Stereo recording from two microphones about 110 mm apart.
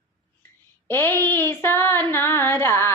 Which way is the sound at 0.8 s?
20° left (ahead or behind).